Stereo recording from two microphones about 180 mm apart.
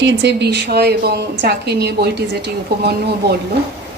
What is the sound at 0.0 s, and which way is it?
A woman's voice, 80° right.